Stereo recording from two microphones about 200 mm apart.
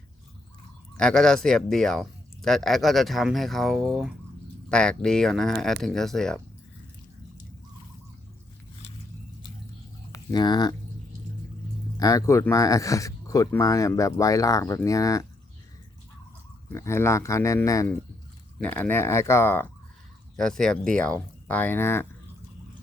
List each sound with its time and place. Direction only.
0.9 s speech: 5° left (ahead or behind)
10.1 s speech: 20° left (ahead or behind)
11.9 s speech: 15° left (ahead or behind)
16.7 s speech: 15° left (ahead or behind)